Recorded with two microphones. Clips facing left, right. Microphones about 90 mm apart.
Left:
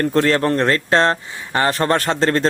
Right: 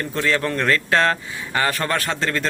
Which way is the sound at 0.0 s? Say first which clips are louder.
Left 6 dB; 50° left (ahead or behind).